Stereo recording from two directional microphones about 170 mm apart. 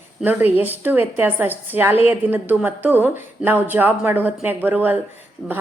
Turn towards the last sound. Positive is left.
turn(degrees=-5)  # may be behind; listen again after turning